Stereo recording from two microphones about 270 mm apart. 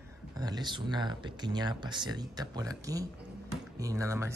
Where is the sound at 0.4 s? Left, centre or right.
Centre.